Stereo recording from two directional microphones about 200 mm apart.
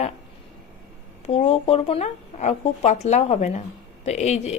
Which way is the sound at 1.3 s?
30° left (ahead or behind).